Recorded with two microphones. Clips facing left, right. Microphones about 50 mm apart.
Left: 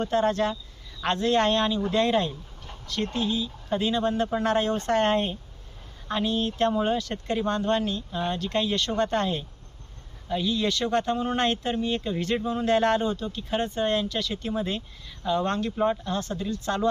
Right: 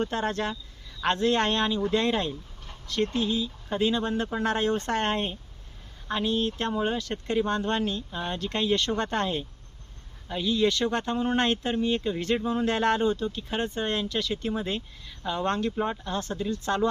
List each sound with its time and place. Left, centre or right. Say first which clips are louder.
0.0 s speech: left 4 dB; centre
3.3 s speech: left 1 dB; centre